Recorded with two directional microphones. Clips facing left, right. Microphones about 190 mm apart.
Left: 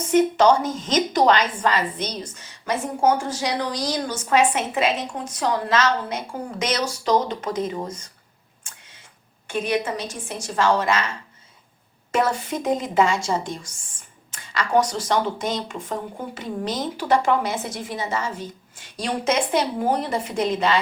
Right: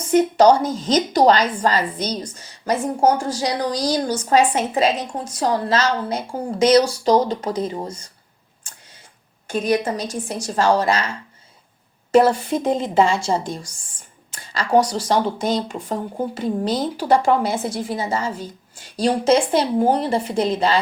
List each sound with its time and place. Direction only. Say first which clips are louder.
0.1 s a woman's voice: right 3 dB; 35° right (ahead or behind)
8.7 s tick: right 1 dB; 35° right (ahead or behind)
9.5 s a woman's voice: right 4 dB; 40° right (ahead or behind)
12.1 s a woman's voice: right 7 dB; 35° right (ahead or behind)